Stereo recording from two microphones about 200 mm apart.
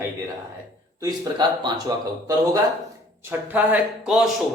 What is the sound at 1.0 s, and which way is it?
Speech, 20° right (ahead or behind).